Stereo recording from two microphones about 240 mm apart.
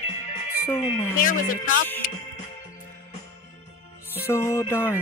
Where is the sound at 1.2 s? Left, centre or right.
Left.